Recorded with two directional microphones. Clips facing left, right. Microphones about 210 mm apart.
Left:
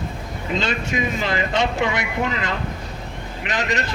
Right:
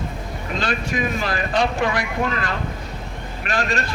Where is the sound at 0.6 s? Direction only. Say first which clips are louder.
Right 1 dB; 25° left (ahead or behind).